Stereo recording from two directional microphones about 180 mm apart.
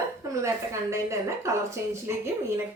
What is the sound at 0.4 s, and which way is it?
Speech, 15° right (ahead or behind).